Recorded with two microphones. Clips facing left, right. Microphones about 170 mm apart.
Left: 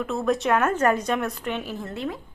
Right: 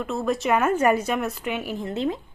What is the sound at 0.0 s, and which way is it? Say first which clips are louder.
A woman's voice: left 1 dB; centre (ahead or behind).